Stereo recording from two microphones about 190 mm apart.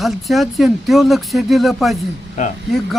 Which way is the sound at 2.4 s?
40° left (ahead or behind).